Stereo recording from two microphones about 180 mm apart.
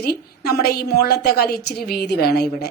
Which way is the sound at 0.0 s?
60° left (ahead or behind).